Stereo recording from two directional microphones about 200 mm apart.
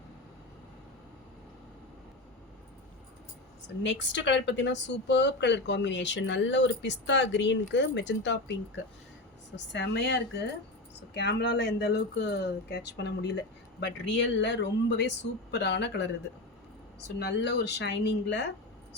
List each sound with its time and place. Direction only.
3.8 s speech: 65° left (ahead or behind)
17.2 s speech: 55° left (ahead or behind)